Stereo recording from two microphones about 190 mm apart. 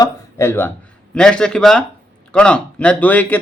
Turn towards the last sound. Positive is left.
turn(degrees=10)  # may be behind; listen again after turning